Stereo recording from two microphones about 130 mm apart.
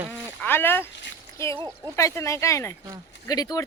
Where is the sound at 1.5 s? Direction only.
30° right (ahead or behind).